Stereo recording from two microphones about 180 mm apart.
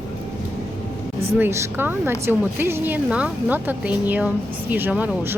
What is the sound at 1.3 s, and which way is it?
Speech, 15° right (ahead or behind).